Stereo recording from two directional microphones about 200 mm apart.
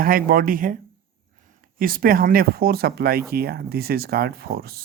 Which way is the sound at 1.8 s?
45° right (ahead or behind).